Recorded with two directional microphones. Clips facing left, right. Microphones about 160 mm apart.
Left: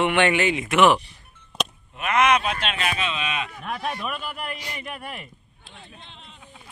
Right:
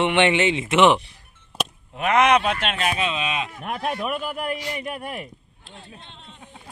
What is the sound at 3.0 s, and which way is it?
Speech, 35° right (ahead or behind).